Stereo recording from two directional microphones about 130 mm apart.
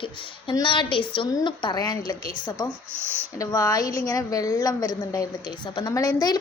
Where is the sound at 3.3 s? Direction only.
25° left (ahead or behind).